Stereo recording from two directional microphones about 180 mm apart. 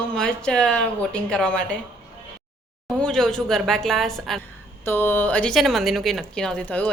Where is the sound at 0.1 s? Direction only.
5° left (ahead or behind).